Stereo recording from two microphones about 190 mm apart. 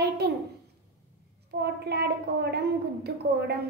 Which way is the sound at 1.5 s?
60° right (ahead or behind).